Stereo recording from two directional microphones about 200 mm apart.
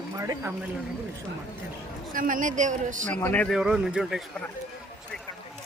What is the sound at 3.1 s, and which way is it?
Speech, 5° left (ahead or behind).